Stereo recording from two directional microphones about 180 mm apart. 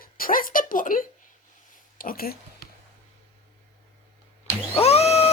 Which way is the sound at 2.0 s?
55° left (ahead or behind).